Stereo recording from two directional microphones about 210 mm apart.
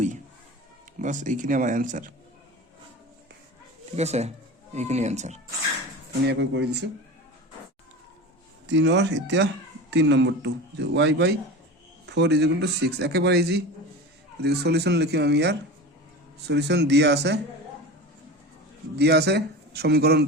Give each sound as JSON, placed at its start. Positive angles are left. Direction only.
{"t": 0.9, "sound": "speech", "side_deg": -35}
{"t": 3.9, "sound": "speech", "side_deg": -30}
{"t": 6.2, "sound": "speech", "side_deg": -55}
{"t": 8.6, "sound": "a man's voice", "side_deg": -60}
{"t": 18.9, "sound": "speech", "side_deg": -50}